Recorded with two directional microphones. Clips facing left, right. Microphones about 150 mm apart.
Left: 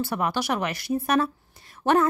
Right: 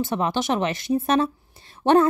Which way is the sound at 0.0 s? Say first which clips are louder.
Right 3 dB; 20° right (ahead or behind).